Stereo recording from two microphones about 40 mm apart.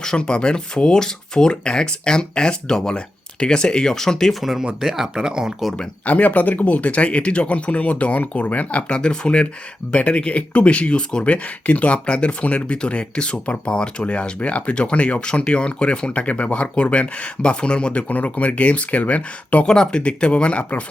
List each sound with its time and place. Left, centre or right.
0.0 s speech: left
4.3 s speech: centre
4.6 s speech: centre
6.1 s speech: left
8.9 s speech: left
18.1 s speech: left
19.6 s speech: centre
20.0 s speech: left